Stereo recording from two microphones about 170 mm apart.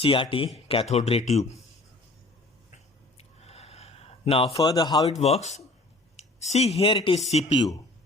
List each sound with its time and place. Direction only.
0.0 s speech: 30° left (ahead or behind)
2.7 s a sound: 40° left (ahead or behind)
4.5 s a man's voice: 20° left (ahead or behind)
5.2 s speech: 40° left (ahead or behind)